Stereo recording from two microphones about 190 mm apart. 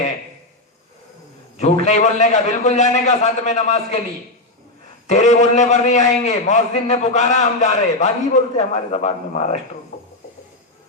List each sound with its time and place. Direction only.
1.5 s a man's voice: 35° left (ahead or behind)
5.0 s a man's voice: 40° left (ahead or behind)